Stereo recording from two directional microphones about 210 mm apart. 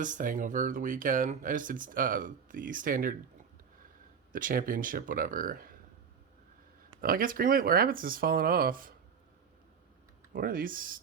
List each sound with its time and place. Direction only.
0.0 s speech: 40° right (ahead or behind)
4.3 s speech: 40° right (ahead or behind)
7.0 s speech: 45° right (ahead or behind)
10.3 s speech: 45° right (ahead or behind)